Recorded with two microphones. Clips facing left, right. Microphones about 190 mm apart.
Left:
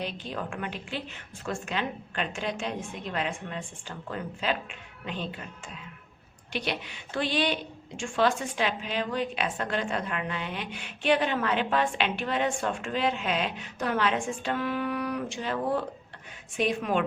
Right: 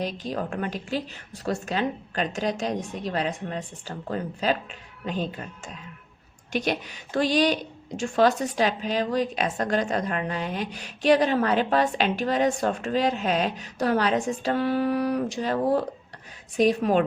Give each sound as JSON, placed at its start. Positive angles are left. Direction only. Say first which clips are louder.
{"t": 0.0, "sound": "a woman's voice", "louder": "right 5 dB", "side_deg": -40}